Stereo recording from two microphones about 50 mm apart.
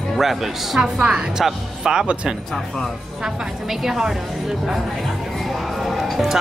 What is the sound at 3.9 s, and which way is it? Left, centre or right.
Speech, centre.